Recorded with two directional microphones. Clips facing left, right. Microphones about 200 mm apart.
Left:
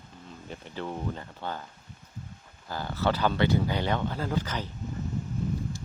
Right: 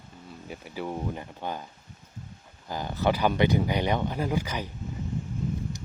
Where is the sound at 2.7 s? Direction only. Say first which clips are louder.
Right 2 dB; 15° right (ahead or behind).